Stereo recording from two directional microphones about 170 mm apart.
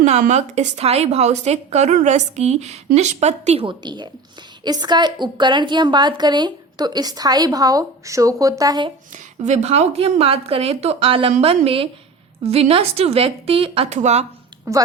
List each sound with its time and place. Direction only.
0.0 s a woman's voice: 45° right (ahead or behind); by 8.9 s 25° right (ahead or behind)
9.4 s a woman's voice: 40° right (ahead or behind)
14.7 s a woman's voice: 20° right (ahead or behind)